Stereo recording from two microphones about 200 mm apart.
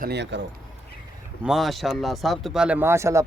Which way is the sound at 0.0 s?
55° right (ahead or behind).